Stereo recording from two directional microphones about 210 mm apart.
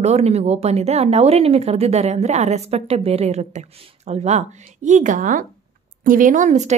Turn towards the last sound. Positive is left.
turn(degrees=-35)  # may be behind; listen again after turning